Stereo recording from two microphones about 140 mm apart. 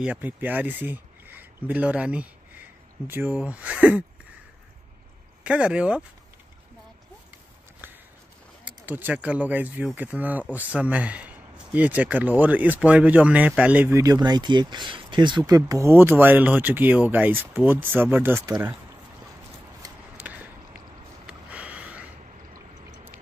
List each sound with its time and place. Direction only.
0.0 s speech: 10° right (ahead or behind)
5.4 s speech: 10° right (ahead or behind)
7.8 s walk: 15° right (ahead or behind)
8.8 s speech: 15° right (ahead or behind)
20.2 s skateboard: 10° right (ahead or behind)
21.3 s a sound: 10° right (ahead or behind)